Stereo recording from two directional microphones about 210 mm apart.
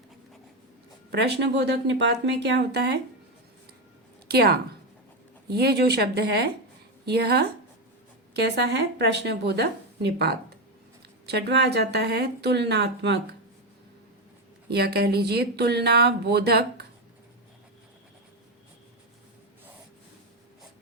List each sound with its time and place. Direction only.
1.1 s speech: 55° right (ahead or behind)
4.3 s a woman's voice: 50° right (ahead or behind)
14.7 s speech: 50° right (ahead or behind)